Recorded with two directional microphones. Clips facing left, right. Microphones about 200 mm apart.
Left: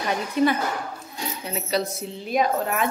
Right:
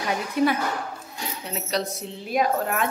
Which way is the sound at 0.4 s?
10° right (ahead or behind).